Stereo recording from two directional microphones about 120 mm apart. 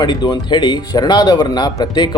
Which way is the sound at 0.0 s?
35° left (ahead or behind).